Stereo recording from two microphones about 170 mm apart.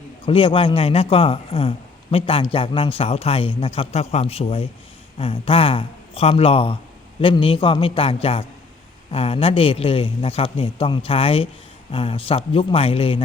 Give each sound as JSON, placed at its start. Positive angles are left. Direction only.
{"t": 0.3, "sound": "a man's voice", "side_deg": 30}